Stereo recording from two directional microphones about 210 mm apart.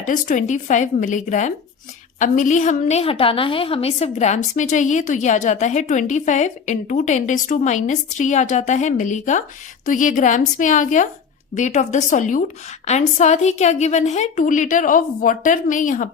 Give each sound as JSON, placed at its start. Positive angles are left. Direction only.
{"t": 0.1, "sound": "a woman's voice", "side_deg": 35}